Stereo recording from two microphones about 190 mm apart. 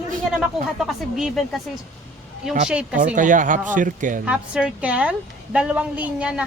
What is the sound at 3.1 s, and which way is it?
Speech, 45° right (ahead or behind).